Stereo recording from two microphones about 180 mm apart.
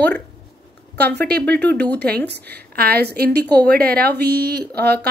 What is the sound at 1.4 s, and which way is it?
Speech, 10° left (ahead or behind).